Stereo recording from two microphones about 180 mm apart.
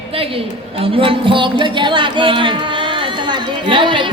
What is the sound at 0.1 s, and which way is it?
A woman's voice, 30° right (ahead or behind).